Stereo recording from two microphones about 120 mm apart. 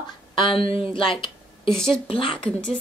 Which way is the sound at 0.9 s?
45° left (ahead or behind).